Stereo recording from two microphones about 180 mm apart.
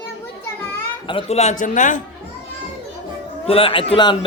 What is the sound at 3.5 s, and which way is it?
Speech, 30° left (ahead or behind).